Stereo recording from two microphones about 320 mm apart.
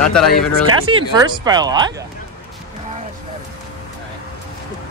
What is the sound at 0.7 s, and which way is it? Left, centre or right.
Speech, centre.